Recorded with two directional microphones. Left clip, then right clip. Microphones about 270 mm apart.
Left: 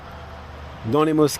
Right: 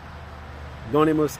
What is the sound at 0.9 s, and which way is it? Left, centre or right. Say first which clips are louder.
Speech: left 2 dB; left.